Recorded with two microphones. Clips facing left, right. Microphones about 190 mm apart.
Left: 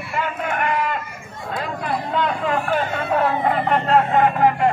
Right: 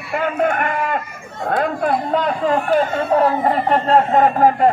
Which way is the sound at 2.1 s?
40° right (ahead or behind).